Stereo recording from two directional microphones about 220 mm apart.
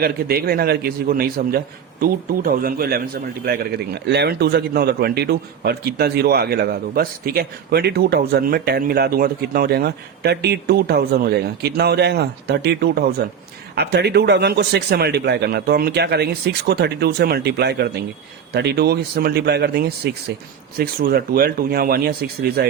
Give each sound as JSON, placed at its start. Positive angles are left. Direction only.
{"t": 0.0, "sound": "a man's voice", "side_deg": -45}